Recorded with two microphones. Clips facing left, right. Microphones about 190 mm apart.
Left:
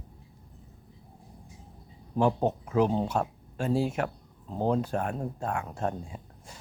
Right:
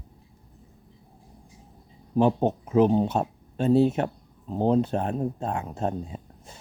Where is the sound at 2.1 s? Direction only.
20° right (ahead or behind).